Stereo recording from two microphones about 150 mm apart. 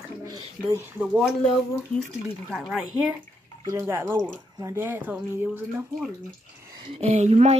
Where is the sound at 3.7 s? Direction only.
20° right (ahead or behind).